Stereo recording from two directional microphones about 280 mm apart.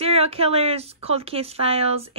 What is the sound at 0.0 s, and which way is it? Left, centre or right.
Speech, right.